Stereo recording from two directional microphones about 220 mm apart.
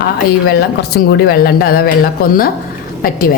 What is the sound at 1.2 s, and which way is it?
Speech, 45° left (ahead or behind).